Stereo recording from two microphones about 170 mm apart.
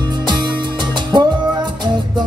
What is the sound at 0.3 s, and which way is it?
Music, 25° right (ahead or behind).